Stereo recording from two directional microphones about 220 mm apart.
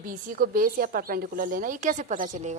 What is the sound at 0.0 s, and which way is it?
Speech, 40° right (ahead or behind).